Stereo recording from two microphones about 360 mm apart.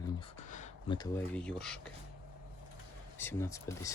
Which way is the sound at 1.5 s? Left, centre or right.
Centre.